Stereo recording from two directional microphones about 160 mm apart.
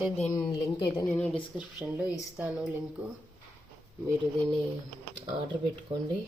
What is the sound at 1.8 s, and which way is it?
Mantra, 10° right (ahead or behind).